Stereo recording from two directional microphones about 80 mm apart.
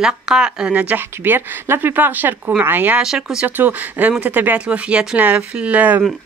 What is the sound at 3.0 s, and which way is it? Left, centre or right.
Speech, centre.